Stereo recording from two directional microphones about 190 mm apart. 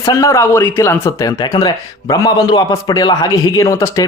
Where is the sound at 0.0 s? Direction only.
20° left (ahead or behind).